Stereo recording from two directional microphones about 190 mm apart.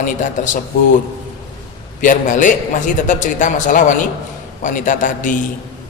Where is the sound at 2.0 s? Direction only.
40° left (ahead or behind).